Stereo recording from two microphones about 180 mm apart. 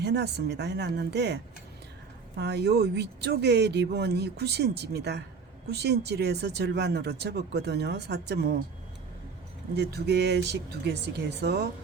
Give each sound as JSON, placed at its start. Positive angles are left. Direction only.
{"t": 0.0, "sound": "speech", "side_deg": -65}
{"t": 2.4, "sound": "speech", "side_deg": -70}
{"t": 9.7, "sound": "speech", "side_deg": -65}